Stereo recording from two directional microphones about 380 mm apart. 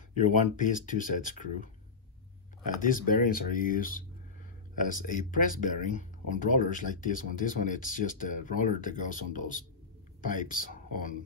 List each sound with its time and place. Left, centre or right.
0.2 s speech: centre